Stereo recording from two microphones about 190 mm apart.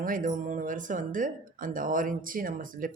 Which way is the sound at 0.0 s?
45° right (ahead or behind).